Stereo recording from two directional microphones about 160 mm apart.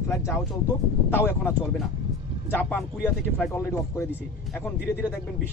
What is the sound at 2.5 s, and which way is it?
Speech, 10° left (ahead or behind).